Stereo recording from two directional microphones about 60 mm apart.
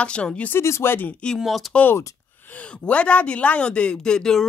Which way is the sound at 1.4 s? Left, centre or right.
Centre.